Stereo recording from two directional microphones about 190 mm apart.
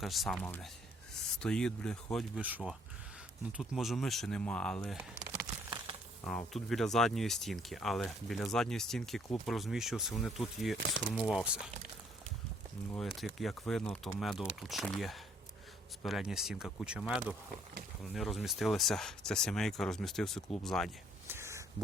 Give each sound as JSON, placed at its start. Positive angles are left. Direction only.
{"t": 0.0, "sound": "speech", "side_deg": 0}
{"t": 3.6, "sound": "speech", "side_deg": 0}
{"t": 5.3, "sound": "a sound", "side_deg": -20}
{"t": 6.5, "sound": "speech", "side_deg": 0}
{"t": 13.0, "sound": "speech", "side_deg": 0}
{"t": 21.2, "sound": "a sound", "side_deg": -15}